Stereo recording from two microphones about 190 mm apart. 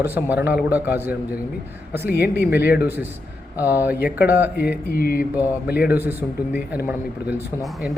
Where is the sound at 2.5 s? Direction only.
10° right (ahead or behind).